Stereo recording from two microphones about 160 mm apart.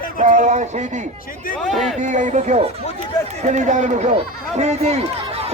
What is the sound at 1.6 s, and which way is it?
Speech, centre (ahead or behind).